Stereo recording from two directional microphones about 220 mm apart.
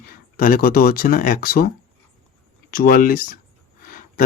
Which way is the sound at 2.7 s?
40° left (ahead or behind).